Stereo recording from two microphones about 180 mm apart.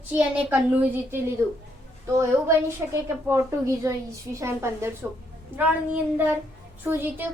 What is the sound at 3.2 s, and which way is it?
Child singing, 15° right (ahead or behind).